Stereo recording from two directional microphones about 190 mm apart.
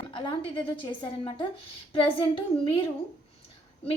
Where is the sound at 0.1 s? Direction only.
25° left (ahead or behind).